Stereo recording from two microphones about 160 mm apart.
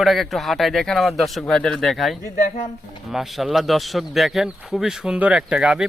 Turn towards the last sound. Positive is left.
turn(degrees=-5)  # may be behind; listen again after turning